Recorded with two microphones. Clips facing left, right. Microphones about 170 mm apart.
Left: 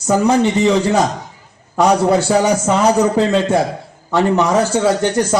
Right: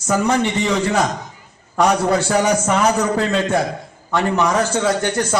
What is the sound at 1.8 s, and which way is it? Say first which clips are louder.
A man's voice: left 3 dB; 30° left (ahead or behind).